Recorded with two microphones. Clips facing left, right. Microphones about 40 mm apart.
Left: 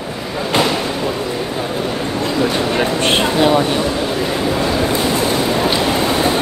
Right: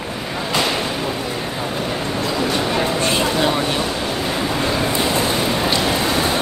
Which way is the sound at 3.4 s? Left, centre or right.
Centre.